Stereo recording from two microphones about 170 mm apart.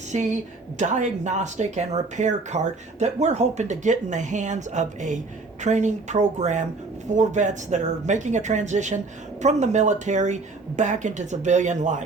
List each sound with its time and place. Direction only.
0.1 s a woman's voice: 45° right (ahead or behind)